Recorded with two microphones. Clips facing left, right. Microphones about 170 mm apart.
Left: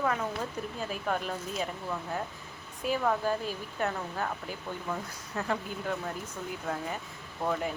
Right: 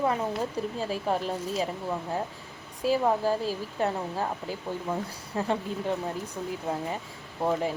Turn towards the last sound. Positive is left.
turn(degrees=-25)  # may be behind; listen again after turning